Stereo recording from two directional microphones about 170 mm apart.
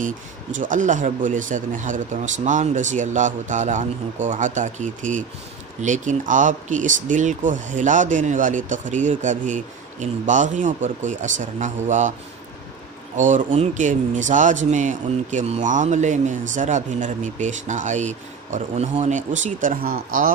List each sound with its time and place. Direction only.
0.0 s speech: 50° right (ahead or behind)
13.1 s speech: 45° right (ahead or behind)